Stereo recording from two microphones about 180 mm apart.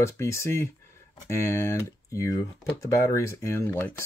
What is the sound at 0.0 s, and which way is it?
Speech, 15° left (ahead or behind).